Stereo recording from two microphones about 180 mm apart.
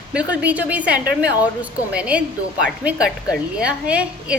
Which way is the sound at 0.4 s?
10° right (ahead or behind).